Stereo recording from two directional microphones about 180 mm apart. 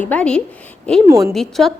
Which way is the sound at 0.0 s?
5° left (ahead or behind).